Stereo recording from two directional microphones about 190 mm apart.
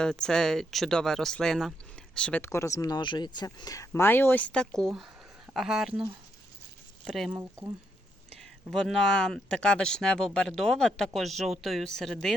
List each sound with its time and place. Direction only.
0.0 s speech: 5° left (ahead or behind)
7.0 s speech: centre (ahead or behind)
7.3 s speech: 15° right (ahead or behind)
8.4 s speech: 5° left (ahead or behind)